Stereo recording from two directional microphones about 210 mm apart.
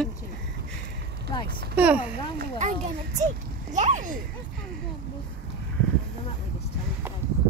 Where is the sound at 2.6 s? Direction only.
35° right (ahead or behind).